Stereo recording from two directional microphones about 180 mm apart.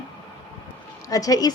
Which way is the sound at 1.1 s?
20° left (ahead or behind).